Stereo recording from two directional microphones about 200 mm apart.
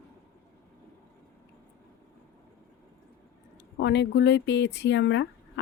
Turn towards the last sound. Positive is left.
turn(degrees=65)  # may be behind; listen again after turning